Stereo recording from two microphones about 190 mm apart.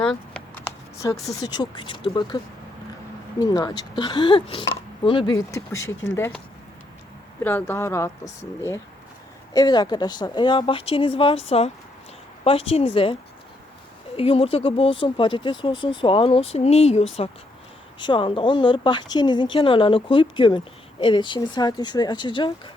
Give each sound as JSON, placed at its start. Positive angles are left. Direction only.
{"t": 0.0, "sound": "a sound", "side_deg": 5}
{"t": 0.9, "sound": "speech", "side_deg": 15}
{"t": 3.4, "sound": "speech", "side_deg": 20}
{"t": 7.4, "sound": "speech", "side_deg": 10}
{"t": 12.5, "sound": "speech", "side_deg": 30}
{"t": 14.2, "sound": "speech", "side_deg": 30}